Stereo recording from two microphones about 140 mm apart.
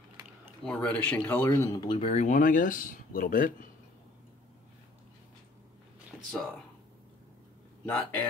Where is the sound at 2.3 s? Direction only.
70° left (ahead or behind).